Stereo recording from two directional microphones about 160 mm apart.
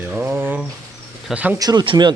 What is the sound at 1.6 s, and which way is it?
Speech, 25° right (ahead or behind).